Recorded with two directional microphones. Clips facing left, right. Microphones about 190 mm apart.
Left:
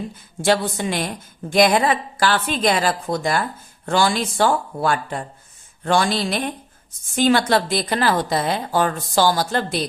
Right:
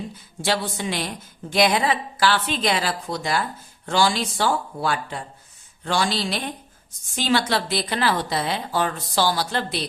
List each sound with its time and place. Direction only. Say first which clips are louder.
0.4 s a woman's voice: left 5 dB; 50° left (ahead or behind)